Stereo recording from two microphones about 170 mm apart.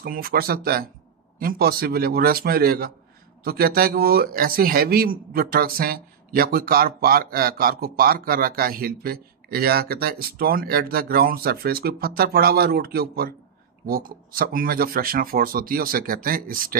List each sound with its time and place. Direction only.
0.0 s a man's voice: 65° right (ahead or behind)